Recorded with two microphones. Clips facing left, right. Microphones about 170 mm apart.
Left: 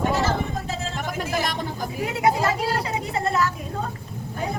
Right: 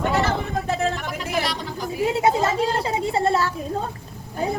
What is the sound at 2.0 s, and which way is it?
A woman's voice, 25° right (ahead or behind).